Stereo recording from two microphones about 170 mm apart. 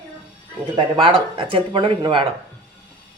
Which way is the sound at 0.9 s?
30° right (ahead or behind).